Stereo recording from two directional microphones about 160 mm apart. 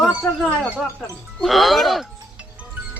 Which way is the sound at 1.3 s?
Centre (ahead or behind).